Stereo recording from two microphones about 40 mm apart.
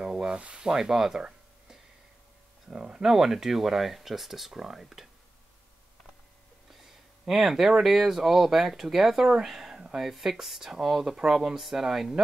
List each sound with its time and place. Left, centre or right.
0.0 s speech: centre
2.7 s speech: right
3.0 s speech: centre
6.8 s a sound: centre
7.8 s speech: centre